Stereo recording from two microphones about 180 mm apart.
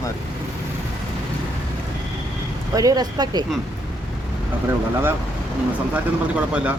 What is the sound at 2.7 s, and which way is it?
Speech, 20° right (ahead or behind).